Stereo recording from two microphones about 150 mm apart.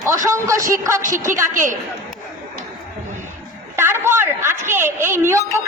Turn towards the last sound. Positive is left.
turn(degrees=-15)  # may be behind; listen again after turning